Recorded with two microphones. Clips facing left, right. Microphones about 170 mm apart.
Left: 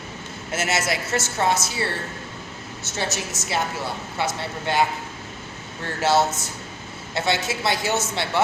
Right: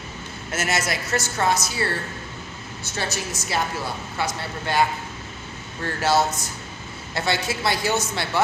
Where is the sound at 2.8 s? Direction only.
20° left (ahead or behind).